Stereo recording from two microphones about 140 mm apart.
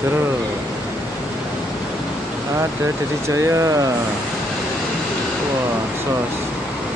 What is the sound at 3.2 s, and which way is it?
Speech, 20° right (ahead or behind).